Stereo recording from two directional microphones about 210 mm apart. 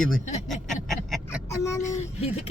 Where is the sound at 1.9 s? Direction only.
30° left (ahead or behind).